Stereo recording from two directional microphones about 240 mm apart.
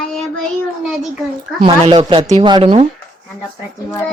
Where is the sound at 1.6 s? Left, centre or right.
Centre.